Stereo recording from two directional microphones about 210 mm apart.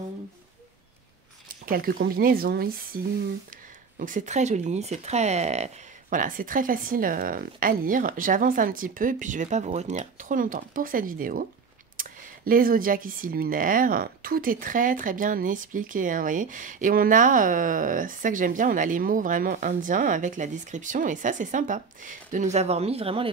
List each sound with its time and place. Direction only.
1.5 s speech: 45° right (ahead or behind)
4.0 s speech: 35° right (ahead or behind)